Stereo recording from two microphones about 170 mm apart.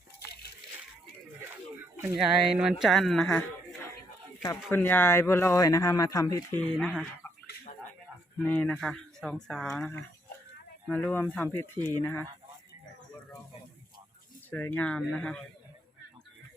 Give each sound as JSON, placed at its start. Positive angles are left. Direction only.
{"t": 2.1, "sound": "speech", "side_deg": -5}
{"t": 6.7, "sound": "speech", "side_deg": 0}
{"t": 8.4, "sound": "speech", "side_deg": 10}
{"t": 14.5, "sound": "speech", "side_deg": 10}